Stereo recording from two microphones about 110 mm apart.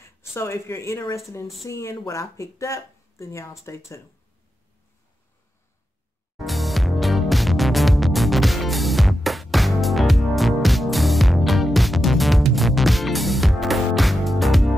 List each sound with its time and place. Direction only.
0.0 s speech: 25° left (ahead or behind)
6.3 s music: centre (ahead or behind)